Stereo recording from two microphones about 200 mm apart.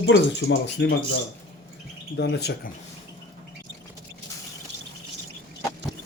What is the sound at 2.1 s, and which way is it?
Speech, 60° left (ahead or behind).